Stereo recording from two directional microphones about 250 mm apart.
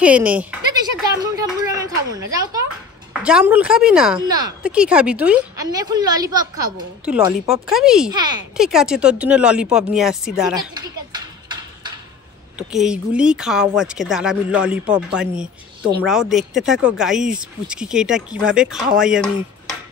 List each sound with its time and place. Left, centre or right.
0.0 s a woman's voice: centre
3.1 s a woman's voice: centre
7.6 s speech: centre
8.1 s a woman's voice: centre
8.5 s speech: centre
10.5 s a sound: centre
12.5 s speech: centre